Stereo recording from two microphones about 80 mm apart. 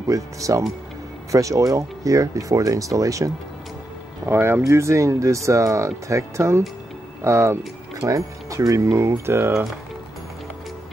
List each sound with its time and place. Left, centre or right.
0.1 s speech: right
4.3 s speech: right